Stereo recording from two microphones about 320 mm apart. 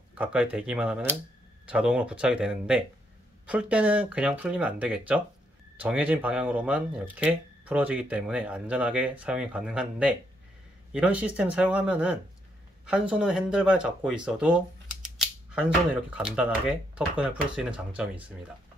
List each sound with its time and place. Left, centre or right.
0.1 s speech: centre